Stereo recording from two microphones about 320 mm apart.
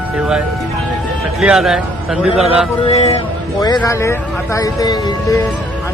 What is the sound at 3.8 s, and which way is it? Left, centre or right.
Speech, centre.